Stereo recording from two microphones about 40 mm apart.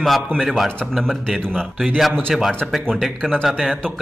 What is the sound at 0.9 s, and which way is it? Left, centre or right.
Speech, centre.